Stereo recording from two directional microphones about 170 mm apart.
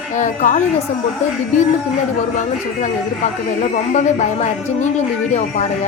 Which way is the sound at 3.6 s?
45° left (ahead or behind).